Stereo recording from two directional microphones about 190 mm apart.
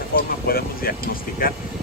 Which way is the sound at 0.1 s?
50° left (ahead or behind).